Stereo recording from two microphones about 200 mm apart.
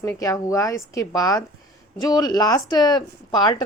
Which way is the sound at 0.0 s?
15° left (ahead or behind).